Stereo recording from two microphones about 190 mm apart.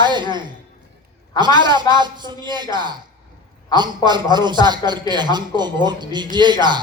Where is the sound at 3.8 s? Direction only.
25° right (ahead or behind).